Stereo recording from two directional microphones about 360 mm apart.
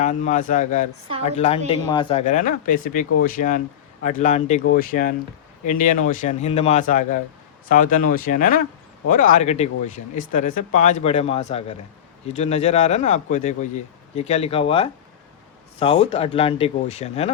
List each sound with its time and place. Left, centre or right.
0.0 s speech: centre